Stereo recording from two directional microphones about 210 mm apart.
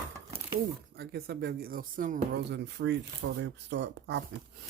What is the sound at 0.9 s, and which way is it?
Speech, 50° right (ahead or behind).